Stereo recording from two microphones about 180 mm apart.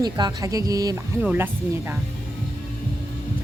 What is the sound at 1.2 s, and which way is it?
Speech, 10° right (ahead or behind).